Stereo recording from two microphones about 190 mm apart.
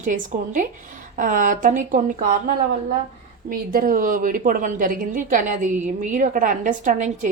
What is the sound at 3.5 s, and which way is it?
A woman's voice, 50° right (ahead or behind).